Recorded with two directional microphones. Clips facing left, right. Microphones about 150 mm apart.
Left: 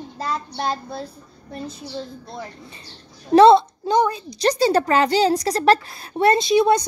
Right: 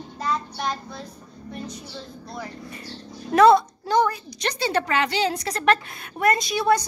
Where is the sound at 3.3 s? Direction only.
30° left (ahead or behind).